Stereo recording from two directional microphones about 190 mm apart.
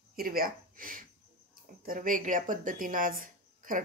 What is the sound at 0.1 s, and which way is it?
Speech, 50° right (ahead or behind).